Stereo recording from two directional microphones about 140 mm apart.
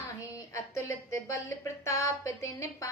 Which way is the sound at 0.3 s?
20° left (ahead or behind).